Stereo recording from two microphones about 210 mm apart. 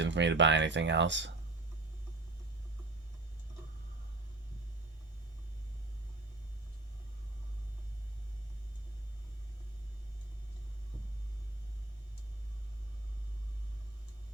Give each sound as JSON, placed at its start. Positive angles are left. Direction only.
{"t": 0.0, "sound": "speech", "side_deg": -60}